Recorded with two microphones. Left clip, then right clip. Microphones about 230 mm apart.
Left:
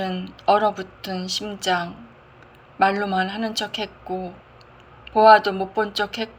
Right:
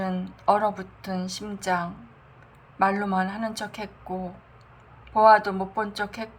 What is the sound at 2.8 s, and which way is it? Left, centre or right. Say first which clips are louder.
Speech: left 4 dB; right.